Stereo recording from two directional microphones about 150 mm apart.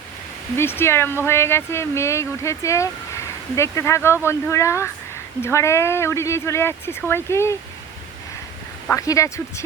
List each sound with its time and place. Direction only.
0.5 s speech: 15° left (ahead or behind)
8.9 s speech: 20° left (ahead or behind)